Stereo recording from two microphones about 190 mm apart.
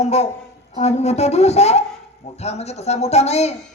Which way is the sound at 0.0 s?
35° left (ahead or behind).